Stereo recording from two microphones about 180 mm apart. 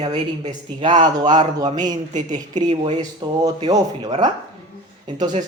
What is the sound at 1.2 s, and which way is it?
Speech, 45° right (ahead or behind).